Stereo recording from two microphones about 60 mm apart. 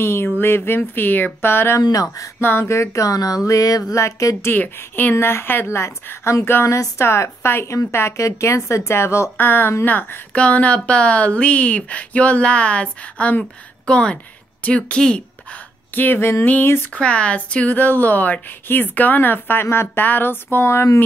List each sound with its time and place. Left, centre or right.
0.0 s speech: left
0.7 s a woman's voice: left
1.8 s speech: left
2.4 s a woman's voice: left
2.7 s speech: left
3.9 s speech: left
4.6 s a woman's voice: left
5.1 s speech: left
9.4 s a woman's voice: left
10.3 s speech: left
15.9 s speech: left
16.9 s a woman's voice: left